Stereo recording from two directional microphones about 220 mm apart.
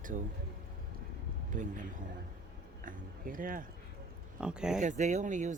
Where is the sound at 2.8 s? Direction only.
40° right (ahead or behind).